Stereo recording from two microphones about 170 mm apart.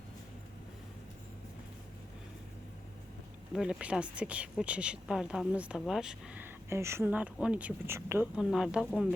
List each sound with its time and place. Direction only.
3.5 s speech: 5° right (ahead or behind)